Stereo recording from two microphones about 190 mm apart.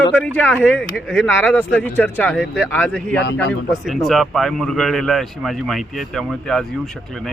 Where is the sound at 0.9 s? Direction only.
5° right (ahead or behind).